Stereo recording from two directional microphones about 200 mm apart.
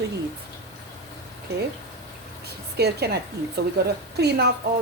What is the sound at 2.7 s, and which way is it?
Speech, 55° right (ahead or behind).